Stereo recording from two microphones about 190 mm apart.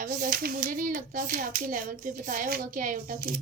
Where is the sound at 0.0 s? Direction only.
40° right (ahead or behind).